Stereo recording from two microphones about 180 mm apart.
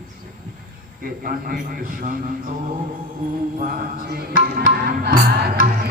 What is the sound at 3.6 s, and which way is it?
Music, 50° right (ahead or behind).